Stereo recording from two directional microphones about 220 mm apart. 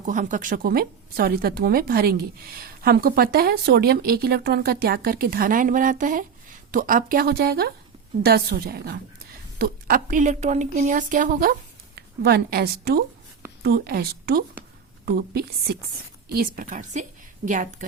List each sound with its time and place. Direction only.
0.0 s a woman's voice: 35° right (ahead or behind)